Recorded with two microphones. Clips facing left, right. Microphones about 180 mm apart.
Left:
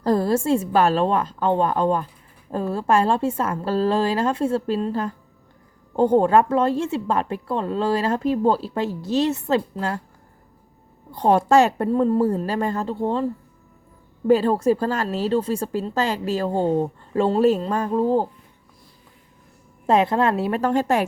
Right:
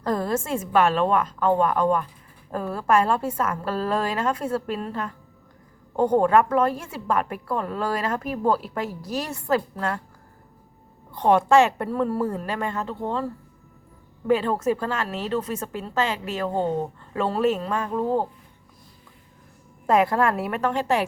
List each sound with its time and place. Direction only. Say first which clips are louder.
0.0 s a woman's voice: left 5 dB; 30° left (ahead or behind)
11.1 s speech: left 1 dB; 35° left (ahead or behind)
11.9 s speech: left 6 dB; 25° left (ahead or behind)
14.3 s speech: left 4 dB; 35° left (ahead or behind)
19.9 s a woman's voice: left 2 dB; 25° left (ahead or behind); by 21.0 s 45° left (ahead or behind)